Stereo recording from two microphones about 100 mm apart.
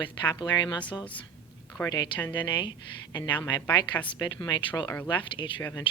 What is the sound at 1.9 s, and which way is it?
Speech, 45° left (ahead or behind).